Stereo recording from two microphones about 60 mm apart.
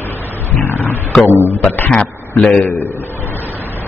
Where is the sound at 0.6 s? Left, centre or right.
Left.